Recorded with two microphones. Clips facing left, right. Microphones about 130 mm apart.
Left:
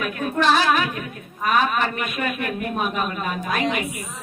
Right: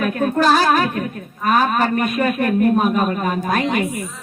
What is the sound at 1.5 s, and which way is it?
A woman's voice, 40° right (ahead or behind).